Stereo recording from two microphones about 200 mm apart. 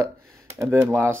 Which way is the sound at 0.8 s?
15° right (ahead or behind).